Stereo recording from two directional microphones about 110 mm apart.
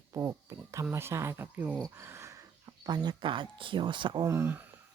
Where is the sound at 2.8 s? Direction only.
40° right (ahead or behind).